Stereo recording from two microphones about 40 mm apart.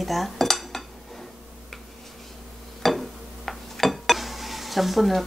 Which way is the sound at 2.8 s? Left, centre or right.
Centre.